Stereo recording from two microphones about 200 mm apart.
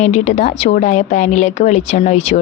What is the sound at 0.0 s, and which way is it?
Speech, 35° left (ahead or behind).